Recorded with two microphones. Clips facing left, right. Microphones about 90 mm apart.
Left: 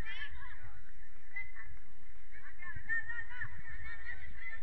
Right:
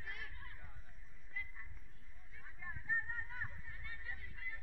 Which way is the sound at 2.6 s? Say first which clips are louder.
Even; 15° right (ahead or behind).